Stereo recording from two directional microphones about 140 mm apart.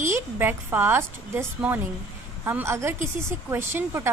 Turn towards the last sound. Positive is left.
turn(degrees=-20)  # may be behind; listen again after turning